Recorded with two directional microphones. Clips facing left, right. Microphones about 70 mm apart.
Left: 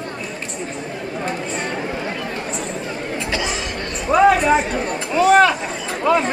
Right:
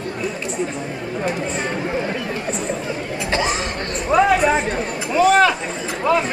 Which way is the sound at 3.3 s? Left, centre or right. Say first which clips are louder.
Right 4 dB; right.